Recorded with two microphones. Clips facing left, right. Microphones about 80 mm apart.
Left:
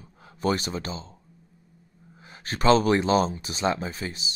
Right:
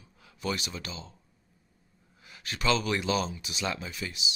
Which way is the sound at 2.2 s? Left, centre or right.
Left.